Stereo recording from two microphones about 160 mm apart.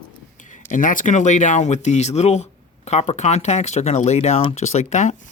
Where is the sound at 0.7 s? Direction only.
55° left (ahead or behind).